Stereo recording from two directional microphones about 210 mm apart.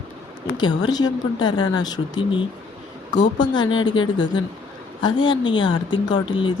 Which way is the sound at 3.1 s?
35° left (ahead or behind).